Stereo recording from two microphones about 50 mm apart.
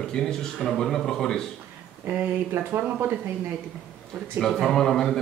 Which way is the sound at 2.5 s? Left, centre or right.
Right.